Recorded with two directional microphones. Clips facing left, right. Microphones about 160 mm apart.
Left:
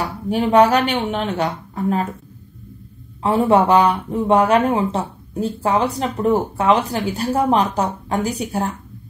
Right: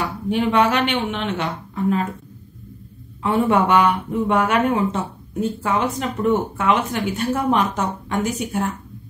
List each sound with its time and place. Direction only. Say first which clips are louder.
0.3 s speech: left 4 dB; 40° left (ahead or behind)
3.2 s speech: left 3 dB; 30° left (ahead or behind)